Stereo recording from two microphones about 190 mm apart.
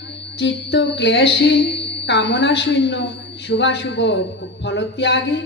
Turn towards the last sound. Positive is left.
turn(degrees=65)  # may be behind; listen again after turning